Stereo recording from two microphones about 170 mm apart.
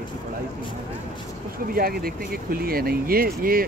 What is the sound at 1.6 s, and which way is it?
Speech, 60° right (ahead or behind).